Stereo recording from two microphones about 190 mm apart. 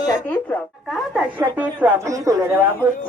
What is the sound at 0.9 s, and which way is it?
A woman's voice, 5° right (ahead or behind).